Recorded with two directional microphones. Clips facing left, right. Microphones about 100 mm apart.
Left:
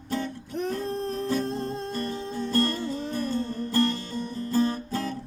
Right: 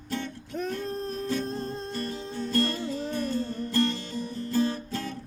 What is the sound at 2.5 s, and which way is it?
Music, 35° left (ahead or behind).